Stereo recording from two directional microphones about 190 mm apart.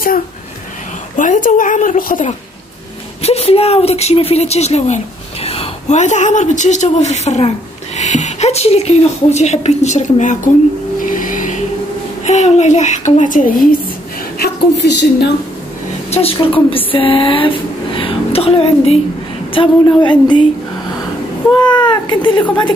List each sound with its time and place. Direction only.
1.1 s a woman's voice: 40° left (ahead or behind)
3.2 s a woman's voice: 30° left (ahead or behind)
11.1 s a sound: 45° left (ahead or behind)
12.3 s a woman's voice: 40° left (ahead or behind)
14.4 s a woman's voice: 65° left (ahead or behind)
16.1 s a woman's voice: 30° left (ahead or behind)
21.7 s a woman's voice: 25° left (ahead or behind)